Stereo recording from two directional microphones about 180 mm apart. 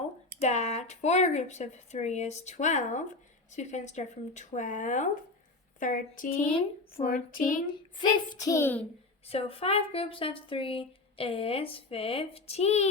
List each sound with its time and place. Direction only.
0.4 s speech: 40° left (ahead or behind)
7.7 s a child's voice: 20° left (ahead or behind)
9.2 s speech: 35° left (ahead or behind)